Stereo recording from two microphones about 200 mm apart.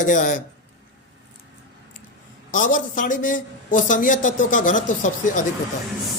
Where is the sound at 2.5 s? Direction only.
40° left (ahead or behind).